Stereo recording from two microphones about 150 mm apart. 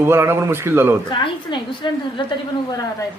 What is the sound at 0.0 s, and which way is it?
Speech, 15° right (ahead or behind).